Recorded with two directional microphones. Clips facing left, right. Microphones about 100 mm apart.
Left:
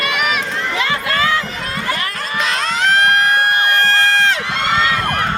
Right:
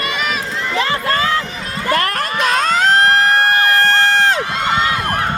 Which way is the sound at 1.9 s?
60° right (ahead or behind).